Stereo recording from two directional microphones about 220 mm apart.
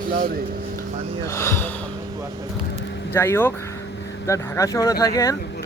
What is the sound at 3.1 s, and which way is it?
Speech, 10° left (ahead or behind).